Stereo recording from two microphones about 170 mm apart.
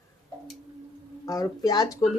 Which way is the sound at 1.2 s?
20° left (ahead or behind).